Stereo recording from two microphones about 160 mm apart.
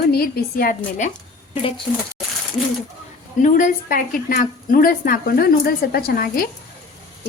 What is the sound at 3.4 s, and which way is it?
A woman's voice, 55° left (ahead or behind).